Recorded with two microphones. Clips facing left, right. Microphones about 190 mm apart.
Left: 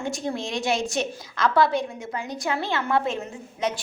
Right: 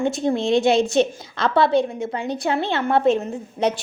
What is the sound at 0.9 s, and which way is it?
Speech, 30° right (ahead or behind).